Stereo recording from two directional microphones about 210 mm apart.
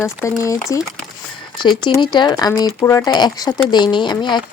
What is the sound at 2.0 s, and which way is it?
Speech, 20° left (ahead or behind).